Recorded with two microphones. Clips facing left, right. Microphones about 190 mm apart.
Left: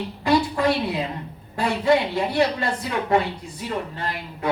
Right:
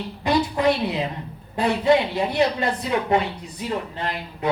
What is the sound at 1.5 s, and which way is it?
A woman's voice, 20° right (ahead or behind).